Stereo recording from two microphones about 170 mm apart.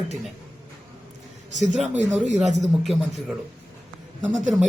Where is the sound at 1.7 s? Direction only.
40° right (ahead or behind).